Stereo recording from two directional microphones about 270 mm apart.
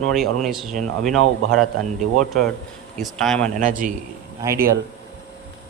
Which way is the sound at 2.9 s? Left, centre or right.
Centre.